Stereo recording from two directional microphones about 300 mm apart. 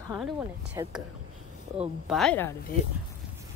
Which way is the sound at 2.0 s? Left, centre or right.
Centre.